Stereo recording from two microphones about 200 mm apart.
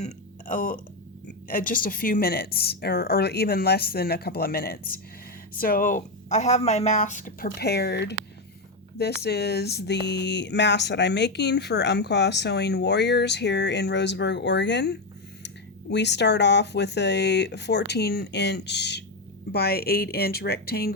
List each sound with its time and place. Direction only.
0.0 s burping: 40° left (ahead or behind)
1.5 s a woman's voice: 45° left (ahead or behind)
9.2 s a woman's voice: 55° left (ahead or behind)